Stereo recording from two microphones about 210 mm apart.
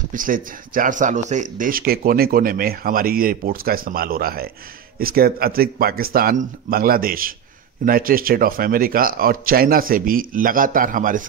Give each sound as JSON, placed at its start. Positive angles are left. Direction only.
{"t": 0.1, "sound": "speech", "side_deg": -40}